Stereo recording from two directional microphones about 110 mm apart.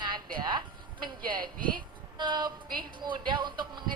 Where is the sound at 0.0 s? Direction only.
45° right (ahead or behind).